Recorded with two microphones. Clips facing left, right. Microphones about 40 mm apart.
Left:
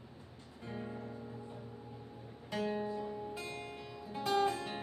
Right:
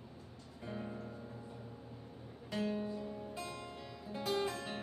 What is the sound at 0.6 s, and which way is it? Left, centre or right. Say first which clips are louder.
Music: left 1 dB; centre.